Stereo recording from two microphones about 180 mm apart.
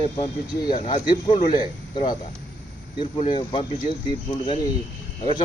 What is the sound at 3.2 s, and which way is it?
Speech, 25° left (ahead or behind).